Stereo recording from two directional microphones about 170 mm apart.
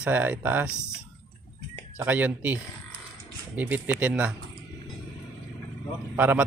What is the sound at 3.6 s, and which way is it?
Speech, 10° right (ahead or behind).